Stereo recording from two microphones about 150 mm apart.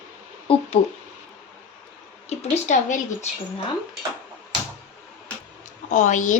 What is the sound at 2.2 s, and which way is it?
Speech, 50° left (ahead or behind).